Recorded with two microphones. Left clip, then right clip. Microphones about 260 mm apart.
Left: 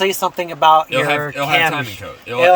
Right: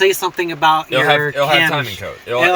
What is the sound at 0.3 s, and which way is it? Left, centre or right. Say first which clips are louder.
Speech: left 2 dB; left.